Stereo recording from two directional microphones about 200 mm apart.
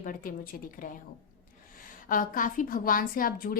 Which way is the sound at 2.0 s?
45° left (ahead or behind).